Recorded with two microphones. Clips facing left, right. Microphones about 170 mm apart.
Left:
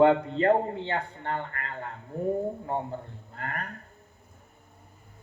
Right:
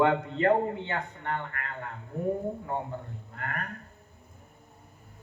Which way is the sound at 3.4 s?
30° left (ahead or behind).